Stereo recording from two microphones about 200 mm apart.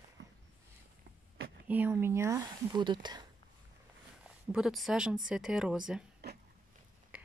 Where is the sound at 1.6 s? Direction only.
10° right (ahead or behind).